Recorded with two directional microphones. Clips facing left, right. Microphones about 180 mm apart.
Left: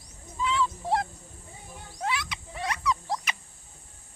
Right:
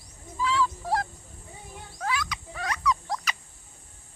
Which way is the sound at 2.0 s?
25° left (ahead or behind).